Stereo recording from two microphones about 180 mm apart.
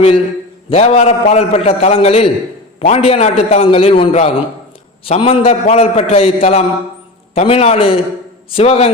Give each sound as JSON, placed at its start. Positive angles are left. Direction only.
{"t": 0.7, "sound": "a man's voice", "side_deg": 35}